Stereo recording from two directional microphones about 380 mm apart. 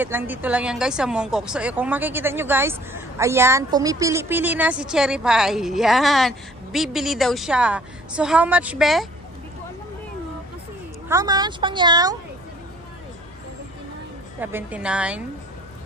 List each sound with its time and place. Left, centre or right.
0.0 s a woman's voice: centre
11.1 s speech: centre
14.4 s a woman's voice: centre